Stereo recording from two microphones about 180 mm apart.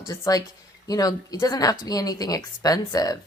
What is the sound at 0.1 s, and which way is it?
Speech, 20° left (ahead or behind).